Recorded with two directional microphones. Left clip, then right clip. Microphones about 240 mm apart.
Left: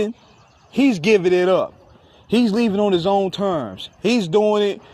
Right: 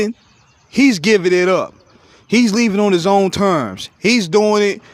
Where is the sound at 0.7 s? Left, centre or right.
Right.